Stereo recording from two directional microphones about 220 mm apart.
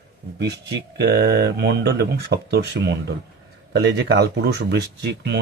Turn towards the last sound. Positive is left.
turn(degrees=-50)  # may be behind; listen again after turning